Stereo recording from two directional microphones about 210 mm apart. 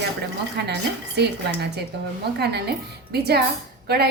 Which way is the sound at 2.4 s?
50° right (ahead or behind).